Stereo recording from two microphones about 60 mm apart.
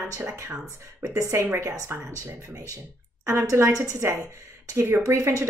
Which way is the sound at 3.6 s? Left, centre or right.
Right.